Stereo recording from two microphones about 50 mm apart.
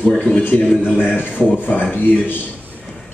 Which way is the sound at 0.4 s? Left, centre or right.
Left.